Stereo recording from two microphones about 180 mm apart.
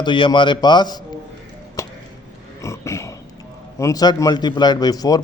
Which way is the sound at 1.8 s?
15° left (ahead or behind).